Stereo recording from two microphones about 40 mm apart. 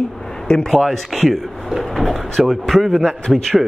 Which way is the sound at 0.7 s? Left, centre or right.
Centre.